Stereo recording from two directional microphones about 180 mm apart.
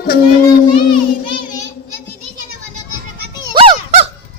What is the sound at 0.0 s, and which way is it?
Speech, 60° left (ahead or behind).